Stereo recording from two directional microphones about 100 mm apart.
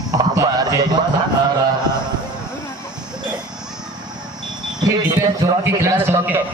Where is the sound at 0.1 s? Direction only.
40° right (ahead or behind).